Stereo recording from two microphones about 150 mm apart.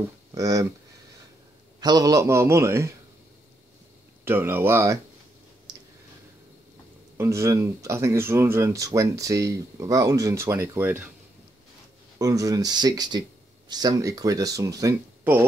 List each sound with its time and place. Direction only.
0.3 s speech: 25° right (ahead or behind)
1.8 s speech: 25° right (ahead or behind)
4.2 s speech: 15° right (ahead or behind)
5.7 s clicking: 30° right (ahead or behind)
7.2 s speech: 20° right (ahead or behind)
12.2 s speech: 25° right (ahead or behind)